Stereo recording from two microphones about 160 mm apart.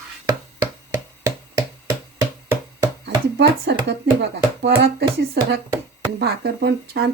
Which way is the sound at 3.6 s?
90° right.